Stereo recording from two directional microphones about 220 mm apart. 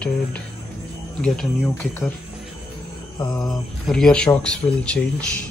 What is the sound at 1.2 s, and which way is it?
Speech, 5° left (ahead or behind).